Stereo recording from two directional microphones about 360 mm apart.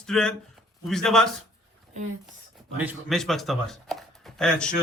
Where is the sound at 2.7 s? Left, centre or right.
Centre.